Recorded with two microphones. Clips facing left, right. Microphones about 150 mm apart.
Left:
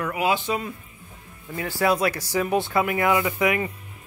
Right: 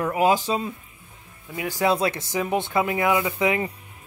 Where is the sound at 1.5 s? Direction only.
15° right (ahead or behind).